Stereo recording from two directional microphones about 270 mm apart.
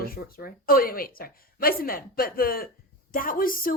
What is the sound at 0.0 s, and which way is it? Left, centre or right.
A woman's voice, left.